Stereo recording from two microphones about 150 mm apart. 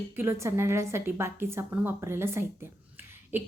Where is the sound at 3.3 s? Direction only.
15° right (ahead or behind).